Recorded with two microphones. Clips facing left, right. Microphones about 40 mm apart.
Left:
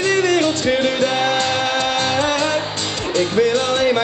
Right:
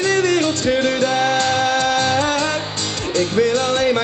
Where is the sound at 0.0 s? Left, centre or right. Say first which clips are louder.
Left 1 dB; left.